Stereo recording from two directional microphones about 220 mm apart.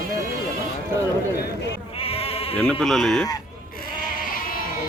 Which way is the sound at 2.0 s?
25° left (ahead or behind).